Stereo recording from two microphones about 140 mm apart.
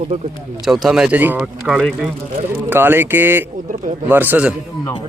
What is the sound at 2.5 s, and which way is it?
A man's voice, 15° right (ahead or behind).